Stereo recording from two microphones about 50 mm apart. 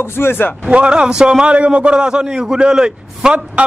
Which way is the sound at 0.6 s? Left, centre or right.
Right.